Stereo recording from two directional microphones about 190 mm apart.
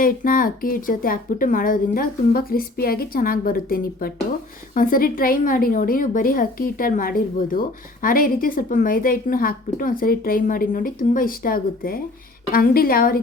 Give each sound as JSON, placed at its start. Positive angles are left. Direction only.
{"t": 0.0, "sound": "a woman's voice", "side_deg": 45}